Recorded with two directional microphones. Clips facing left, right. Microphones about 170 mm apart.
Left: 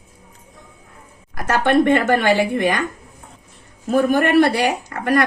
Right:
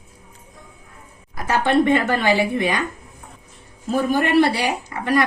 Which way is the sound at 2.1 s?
50° left (ahead or behind).